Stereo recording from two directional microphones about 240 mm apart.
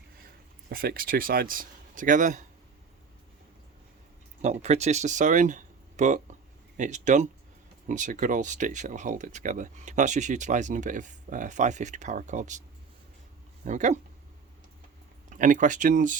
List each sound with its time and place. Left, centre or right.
0.7 s speech: right
4.4 s speech: right
13.7 s speech: right
15.3 s speech: right